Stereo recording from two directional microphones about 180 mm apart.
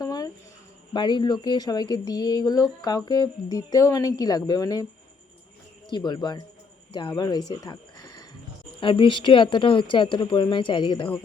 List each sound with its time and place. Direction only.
0.0 s a sound: 20° left (ahead or behind)
0.9 s speech: 25° left (ahead or behind)
5.9 s speech: 25° left (ahead or behind)